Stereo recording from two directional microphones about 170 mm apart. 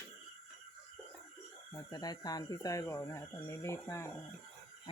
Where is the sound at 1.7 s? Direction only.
25° left (ahead or behind).